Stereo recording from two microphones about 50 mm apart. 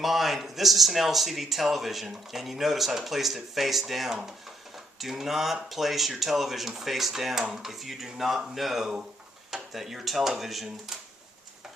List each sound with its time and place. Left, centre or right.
0.0 s speech: centre